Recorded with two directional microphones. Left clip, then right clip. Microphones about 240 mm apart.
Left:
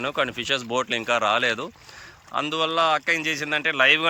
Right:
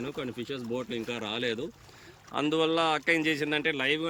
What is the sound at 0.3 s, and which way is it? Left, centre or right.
Speech, centre.